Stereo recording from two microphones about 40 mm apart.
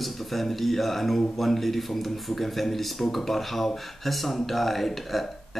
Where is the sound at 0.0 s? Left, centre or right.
Centre.